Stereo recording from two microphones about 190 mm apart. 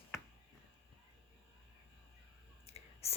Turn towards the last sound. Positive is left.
turn(degrees=30)  # may be behind; listen again after turning